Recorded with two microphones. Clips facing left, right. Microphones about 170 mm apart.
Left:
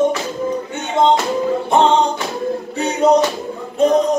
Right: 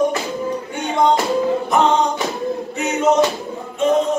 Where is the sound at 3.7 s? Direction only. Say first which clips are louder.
Left 3 dB; 40° left (ahead or behind).